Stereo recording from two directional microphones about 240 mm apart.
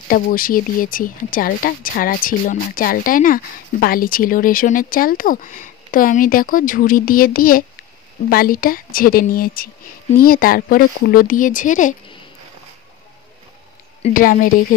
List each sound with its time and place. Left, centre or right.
0.1 s speech: left
14.0 s speech: left